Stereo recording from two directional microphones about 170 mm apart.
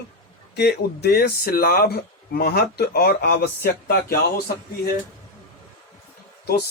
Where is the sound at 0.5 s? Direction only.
70° left (ahead or behind).